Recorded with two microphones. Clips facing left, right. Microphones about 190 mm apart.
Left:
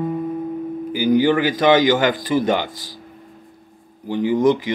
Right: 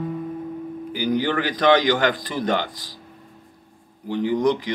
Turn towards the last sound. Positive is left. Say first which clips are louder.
# left 4 dB
turn(degrees=5)  # may be behind; listen again after turning